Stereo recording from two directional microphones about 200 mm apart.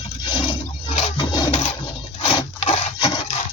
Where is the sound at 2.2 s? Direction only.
25° left (ahead or behind).